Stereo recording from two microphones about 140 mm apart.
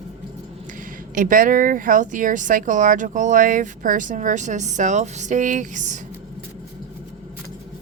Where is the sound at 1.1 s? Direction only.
75° right (ahead or behind).